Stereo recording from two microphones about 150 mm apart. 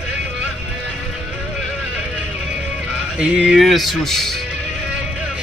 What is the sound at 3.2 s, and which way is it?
Speech, 5° right (ahead or behind).